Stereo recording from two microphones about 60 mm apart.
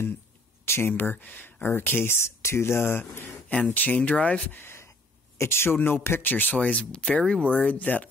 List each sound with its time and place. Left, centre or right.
0.7 s speech: left
4.6 s a sound: left
5.4 s speech: left
5.8 s speech: left